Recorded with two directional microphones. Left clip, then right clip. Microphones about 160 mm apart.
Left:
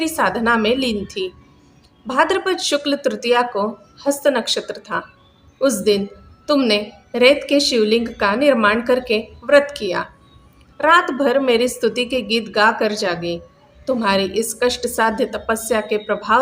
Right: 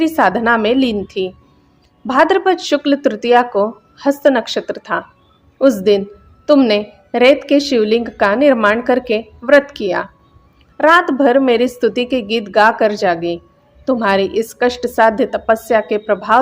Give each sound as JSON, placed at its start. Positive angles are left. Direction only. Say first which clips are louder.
{"t": 0.0, "sound": "a woman's voice", "louder": "right 5 dB", "side_deg": -50}